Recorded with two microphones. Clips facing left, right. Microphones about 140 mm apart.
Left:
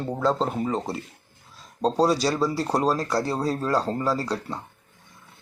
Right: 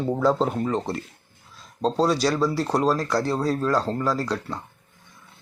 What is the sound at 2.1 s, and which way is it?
Speech, 35° left (ahead or behind).